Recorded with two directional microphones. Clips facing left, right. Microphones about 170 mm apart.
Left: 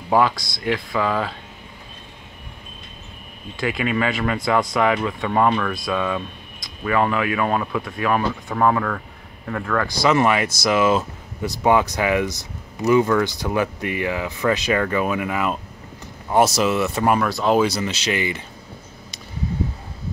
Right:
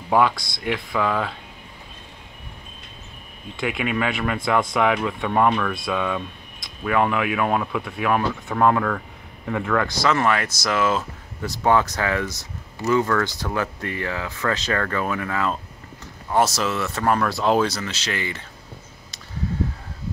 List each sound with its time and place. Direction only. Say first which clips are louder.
0.7 s speech: left 1 dB; 5° left (ahead or behind)
3.5 s speech: left 2 dB; centre (ahead or behind)
10.0 s speech: left 6 dB; 15° left (ahead or behind)
17.3 s speech: left 2 dB; centre (ahead or behind)